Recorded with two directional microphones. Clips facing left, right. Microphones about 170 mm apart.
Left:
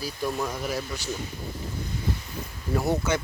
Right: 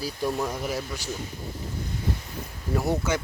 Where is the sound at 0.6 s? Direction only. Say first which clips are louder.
Even; 20° right (ahead or behind).